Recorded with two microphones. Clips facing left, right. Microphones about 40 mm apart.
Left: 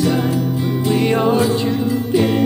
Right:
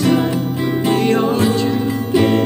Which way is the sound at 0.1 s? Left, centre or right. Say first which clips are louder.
Right 1 dB; right.